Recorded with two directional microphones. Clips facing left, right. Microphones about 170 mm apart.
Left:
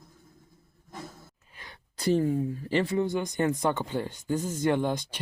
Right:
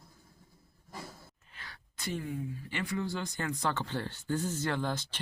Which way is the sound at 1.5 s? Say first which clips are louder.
Left 2 dB; 20° left (ahead or behind).